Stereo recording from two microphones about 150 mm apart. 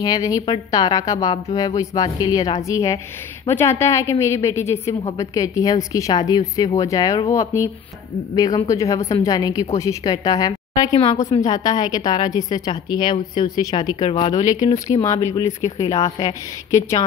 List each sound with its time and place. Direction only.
0.0 s a woman's voice: 25° left (ahead or behind)